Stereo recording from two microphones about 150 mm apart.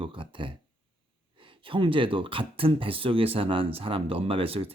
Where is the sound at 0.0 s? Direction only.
35° right (ahead or behind).